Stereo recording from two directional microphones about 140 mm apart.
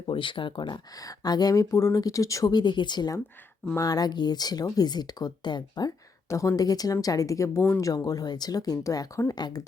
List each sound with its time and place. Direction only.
0.1 s speech: 35° left (ahead or behind)